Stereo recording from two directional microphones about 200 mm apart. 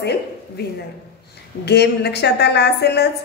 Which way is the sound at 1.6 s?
55° left (ahead or behind).